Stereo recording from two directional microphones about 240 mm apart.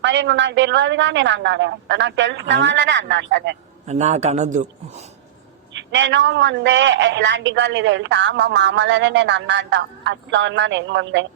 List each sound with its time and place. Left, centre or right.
0.0 s a man's voice: right
3.8 s a man's voice: right
5.7 s a man's voice: right